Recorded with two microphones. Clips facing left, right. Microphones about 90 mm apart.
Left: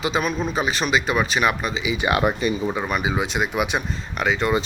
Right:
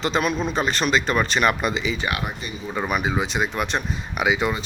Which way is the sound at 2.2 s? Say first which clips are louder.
Left 10 dB; 80° left.